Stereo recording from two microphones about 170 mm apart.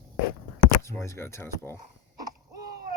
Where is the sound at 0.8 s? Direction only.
15° left (ahead or behind).